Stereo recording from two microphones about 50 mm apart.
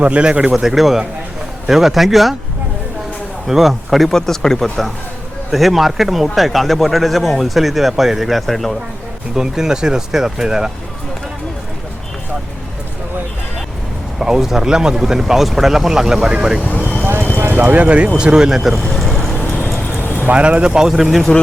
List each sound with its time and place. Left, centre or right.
0.0 s speech: right
0.5 s speech: centre
3.4 s speech: centre
9.3 s speech: centre
14.2 s speech: centre
16.6 s vehicle: left
17.0 s a sound: right
17.5 s speech: right; by 18.8 s centre
18.9 s vehicle: centre
20.1 s vehicle: right
20.4 s speech: right